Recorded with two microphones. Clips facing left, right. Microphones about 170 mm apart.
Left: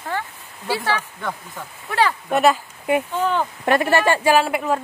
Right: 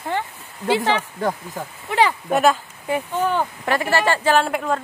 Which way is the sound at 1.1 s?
40° right (ahead or behind).